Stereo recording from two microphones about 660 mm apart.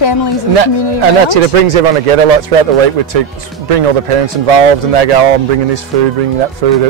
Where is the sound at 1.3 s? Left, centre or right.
Right.